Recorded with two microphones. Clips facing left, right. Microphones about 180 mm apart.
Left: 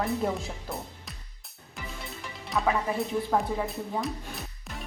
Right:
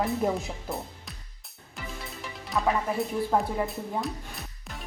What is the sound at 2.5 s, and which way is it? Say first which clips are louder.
Speech: even; centre (ahead or behind).